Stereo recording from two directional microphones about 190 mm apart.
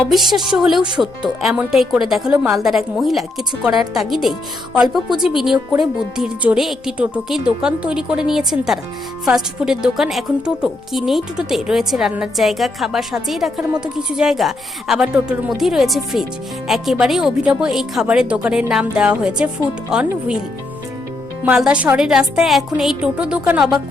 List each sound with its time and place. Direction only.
0.1 s a woman's voice: centre (ahead or behind)
0.8 s speech: 25° right (ahead or behind)
1.4 s a woman's voice: centre (ahead or behind)
21.4 s a woman's voice: 5° right (ahead or behind)